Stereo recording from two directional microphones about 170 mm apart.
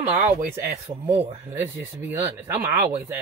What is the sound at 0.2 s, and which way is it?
Speech, 45° right (ahead or behind).